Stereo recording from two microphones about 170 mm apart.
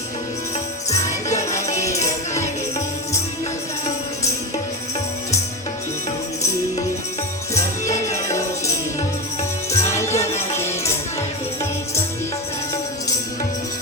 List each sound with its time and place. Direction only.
2.3 s music: 15° left (ahead or behind)
7.5 s music: 20° left (ahead or behind)
9.7 s music: 15° left (ahead or behind)
10.2 s music: 40° left (ahead or behind)
10.6 s music: 15° left (ahead or behind)